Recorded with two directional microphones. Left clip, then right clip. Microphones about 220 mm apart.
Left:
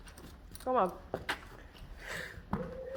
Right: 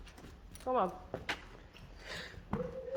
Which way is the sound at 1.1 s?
35° left (ahead or behind).